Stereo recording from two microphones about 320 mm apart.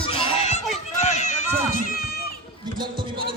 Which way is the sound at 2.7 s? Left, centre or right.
Centre.